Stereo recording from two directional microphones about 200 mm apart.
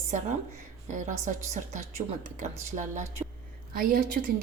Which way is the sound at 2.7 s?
30° right (ahead or behind).